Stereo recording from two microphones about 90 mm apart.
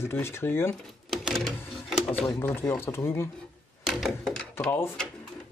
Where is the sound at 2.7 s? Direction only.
25° left (ahead or behind).